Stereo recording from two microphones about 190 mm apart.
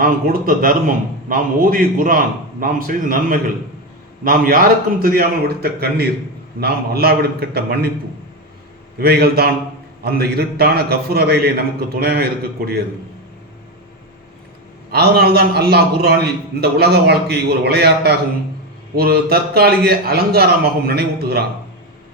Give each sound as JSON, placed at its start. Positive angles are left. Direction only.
{"t": 0.0, "sound": "a man's voice", "side_deg": -50}
{"t": 9.0, "sound": "a man's voice", "side_deg": -55}
{"t": 14.8, "sound": "a man's voice", "side_deg": -55}